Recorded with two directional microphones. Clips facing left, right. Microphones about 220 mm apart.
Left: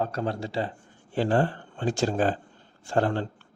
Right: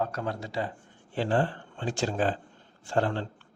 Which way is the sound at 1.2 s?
45° left (ahead or behind).